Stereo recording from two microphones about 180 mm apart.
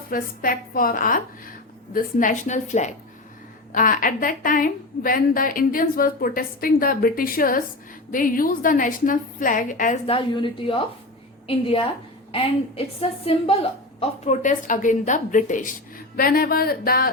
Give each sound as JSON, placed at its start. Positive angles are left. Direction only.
{"t": 0.1, "sound": "a woman's voice", "side_deg": 50}
{"t": 10.1, "sound": "a woman's voice", "side_deg": 30}